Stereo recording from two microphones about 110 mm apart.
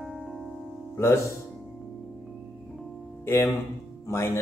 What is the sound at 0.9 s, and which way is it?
Speech, 25° left (ahead or behind).